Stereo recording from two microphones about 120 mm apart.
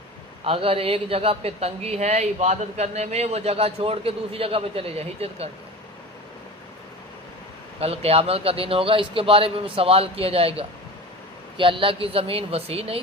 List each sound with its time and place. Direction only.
0.4 s a woman's voice: 50° right (ahead or behind)
7.8 s a man's voice: 55° right (ahead or behind)